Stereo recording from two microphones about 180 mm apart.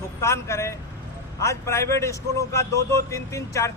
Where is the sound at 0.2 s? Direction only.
15° left (ahead or behind).